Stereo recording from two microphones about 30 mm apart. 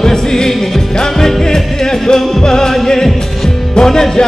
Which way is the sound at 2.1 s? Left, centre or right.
Left.